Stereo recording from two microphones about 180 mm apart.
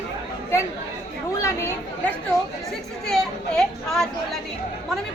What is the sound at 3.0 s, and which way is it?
A child's voice, centre (ahead or behind).